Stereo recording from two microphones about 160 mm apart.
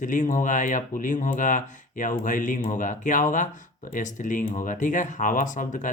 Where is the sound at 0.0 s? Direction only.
55° left (ahead or behind).